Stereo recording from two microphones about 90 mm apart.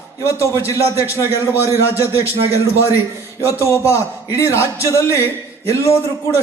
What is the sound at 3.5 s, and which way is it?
A man's voice, 30° left (ahead or behind).